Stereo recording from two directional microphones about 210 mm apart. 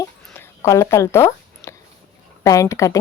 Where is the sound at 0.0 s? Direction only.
15° left (ahead or behind).